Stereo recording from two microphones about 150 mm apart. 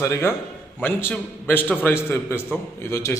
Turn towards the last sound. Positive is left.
turn(degrees=20)  # may be behind; listen again after turning